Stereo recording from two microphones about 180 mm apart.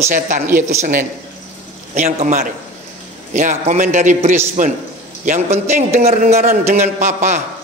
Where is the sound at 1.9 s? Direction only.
35° right (ahead or behind).